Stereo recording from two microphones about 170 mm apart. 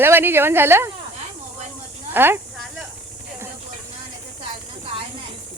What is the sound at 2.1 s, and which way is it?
Speech, 10° right (ahead or behind).